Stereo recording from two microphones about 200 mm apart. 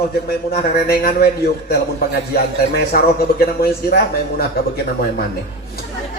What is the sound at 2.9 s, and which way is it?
Speech, 50° left (ahead or behind).